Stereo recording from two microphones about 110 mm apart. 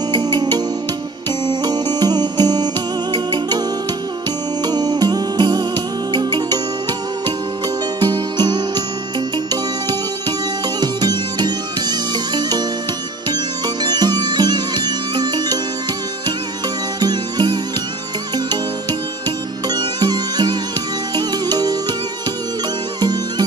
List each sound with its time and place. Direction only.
0.1 s music: 40° right (ahead or behind)
4.6 s music: 40° right (ahead or behind)
8.0 s music: 40° right (ahead or behind)
10.8 s music: 40° right (ahead or behind)
13.8 s music: 40° right (ahead or behind)
17.0 s music: 40° right (ahead or behind)
19.7 s music: 40° right (ahead or behind)
22.9 s music: 40° right (ahead or behind)